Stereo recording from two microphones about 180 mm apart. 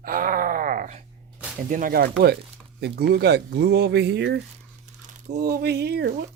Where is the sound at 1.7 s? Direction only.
50° right (ahead or behind).